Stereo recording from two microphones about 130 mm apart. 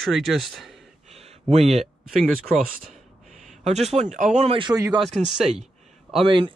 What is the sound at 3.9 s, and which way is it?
Speech, 80° right.